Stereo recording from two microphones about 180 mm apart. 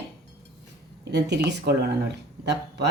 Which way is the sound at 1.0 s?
70° right (ahead or behind).